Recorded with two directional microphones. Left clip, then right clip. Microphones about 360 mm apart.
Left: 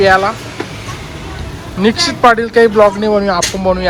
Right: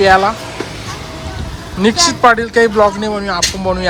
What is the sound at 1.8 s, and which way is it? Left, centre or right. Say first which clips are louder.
Speech: even; centre.